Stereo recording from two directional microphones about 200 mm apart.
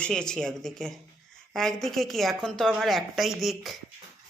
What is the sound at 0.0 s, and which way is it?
Speech, 5° left (ahead or behind).